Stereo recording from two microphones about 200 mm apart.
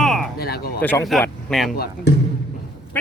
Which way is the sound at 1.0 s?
Centre (ahead or behind).